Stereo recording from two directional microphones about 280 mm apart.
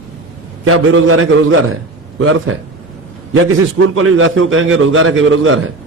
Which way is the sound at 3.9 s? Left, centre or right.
Right.